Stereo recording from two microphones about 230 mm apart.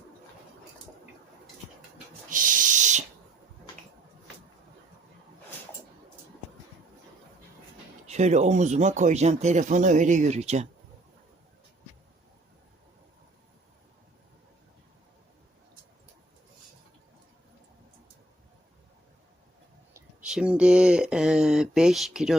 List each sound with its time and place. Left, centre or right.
2.3 s owl: right
8.0 s speech: right
19.9 s speech: centre